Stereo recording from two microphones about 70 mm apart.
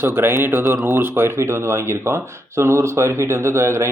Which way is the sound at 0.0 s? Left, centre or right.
Right.